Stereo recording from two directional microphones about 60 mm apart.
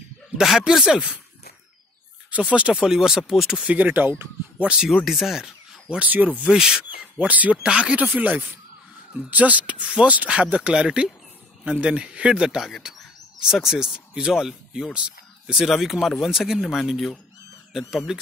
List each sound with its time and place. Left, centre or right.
0.4 s speech: centre
2.3 s speech: right; by 3.6 s centre
3.6 s speech: right
4.6 s speech: centre
5.0 s speech: centre
5.9 s speech: right
6.4 s speech: centre
12.4 s speech: centre